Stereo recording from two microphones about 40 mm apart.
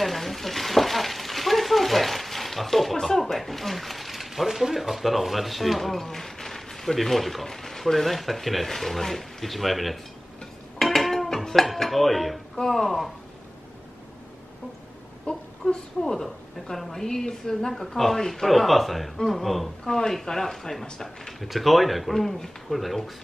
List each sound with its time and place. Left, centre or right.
0.0 s stir: centre
7.4 s speech: centre
10.8 s dishes: centre
12.6 s speech: centre
15.3 s a sound: left
16.0 s a woman's voice: centre
19.8 s a woman's voice: centre
21.4 s speech: centre